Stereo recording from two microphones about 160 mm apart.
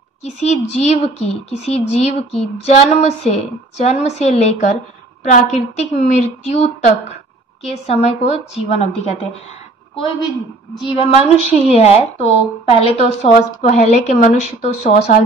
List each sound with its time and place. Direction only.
0.2 s a woman's voice: 40° left (ahead or behind)
9.9 s a woman's voice: 30° left (ahead or behind)
11.7 s a woman's voice: 40° left (ahead or behind)